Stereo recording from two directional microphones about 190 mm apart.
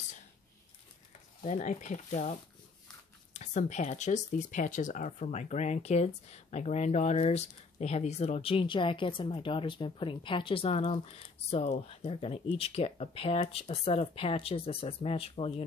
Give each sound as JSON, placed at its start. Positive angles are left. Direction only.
{"t": 1.4, "sound": "speech", "side_deg": 40}
{"t": 3.3, "sound": "speech", "side_deg": 40}